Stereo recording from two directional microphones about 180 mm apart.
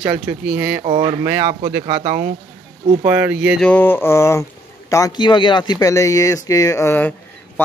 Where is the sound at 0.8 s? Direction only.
35° right (ahead or behind).